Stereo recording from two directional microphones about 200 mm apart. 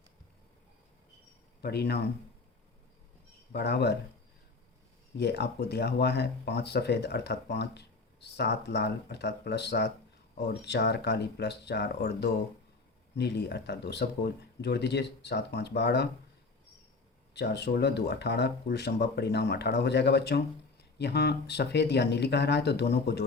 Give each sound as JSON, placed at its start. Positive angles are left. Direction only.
{"t": 1.6, "sound": "speech", "side_deg": 55}
{"t": 3.5, "sound": "speech", "side_deg": 55}
{"t": 5.1, "sound": "speech", "side_deg": 55}
{"t": 17.3, "sound": "speech", "side_deg": 55}